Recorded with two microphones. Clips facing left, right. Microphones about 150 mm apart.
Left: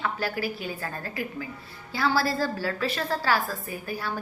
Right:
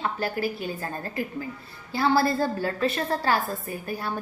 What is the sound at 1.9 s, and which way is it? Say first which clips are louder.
A woman's voice: right 3 dB; 25° right (ahead or behind).